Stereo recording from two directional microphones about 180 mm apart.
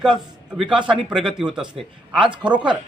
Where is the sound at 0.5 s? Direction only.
5° right (ahead or behind).